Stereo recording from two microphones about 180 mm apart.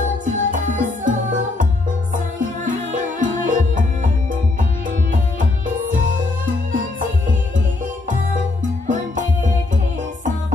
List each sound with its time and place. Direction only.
0.2 s music: 45° right (ahead or behind)
3.2 s music: 45° right (ahead or behind)
8.8 s music: 45° right (ahead or behind)